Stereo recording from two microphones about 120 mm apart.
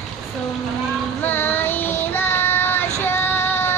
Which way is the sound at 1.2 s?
15° left (ahead or behind).